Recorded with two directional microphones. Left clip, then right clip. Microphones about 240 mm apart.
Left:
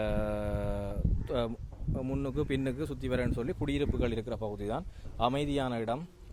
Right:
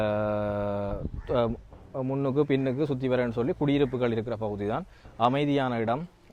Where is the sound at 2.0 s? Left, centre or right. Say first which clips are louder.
Right 8 dB; centre.